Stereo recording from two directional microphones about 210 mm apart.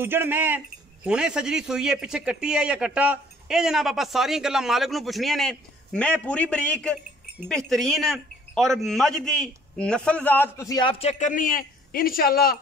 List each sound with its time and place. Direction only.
0.0 s a man's voice: 10° right (ahead or behind); by 12.5 s 45° left (ahead or behind)